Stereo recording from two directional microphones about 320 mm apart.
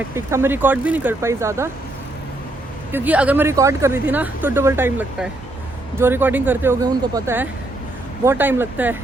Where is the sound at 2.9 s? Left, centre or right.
Centre.